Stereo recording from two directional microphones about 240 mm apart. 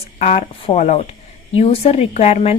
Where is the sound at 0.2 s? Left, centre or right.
Left.